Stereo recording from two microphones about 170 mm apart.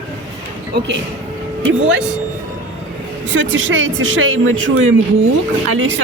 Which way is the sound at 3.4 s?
90° right.